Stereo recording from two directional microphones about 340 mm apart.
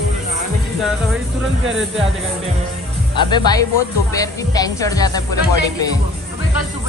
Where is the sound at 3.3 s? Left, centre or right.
Centre.